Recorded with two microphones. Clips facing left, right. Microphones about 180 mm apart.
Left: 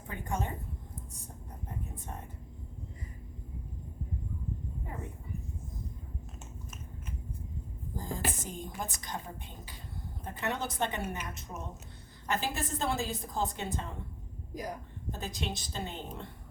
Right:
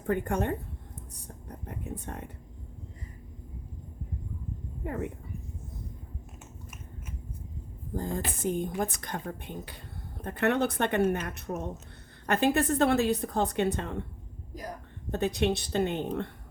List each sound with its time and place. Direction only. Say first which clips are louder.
0.1 s a woman's voice: right 8 dB; 60° right (ahead or behind)
1.5 s speech: right 5 dB; 75° right (ahead or behind)
4.8 s a woman's voice: right 9 dB; 75° right (ahead or behind)
7.9 s a woman's voice: right 4 dB; 60° right (ahead or behind)
15.1 s a woman's voice: right 11 dB; 65° right (ahead or behind)